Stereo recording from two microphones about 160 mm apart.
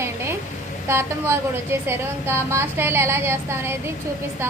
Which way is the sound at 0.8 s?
15° right (ahead or behind).